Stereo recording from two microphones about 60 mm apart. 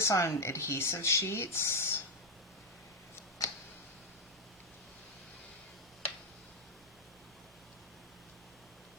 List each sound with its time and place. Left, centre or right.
0.0 s speech: left
3.4 s tick-tock: left